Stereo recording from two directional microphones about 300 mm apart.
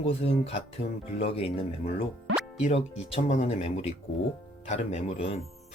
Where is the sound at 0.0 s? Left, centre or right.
Centre.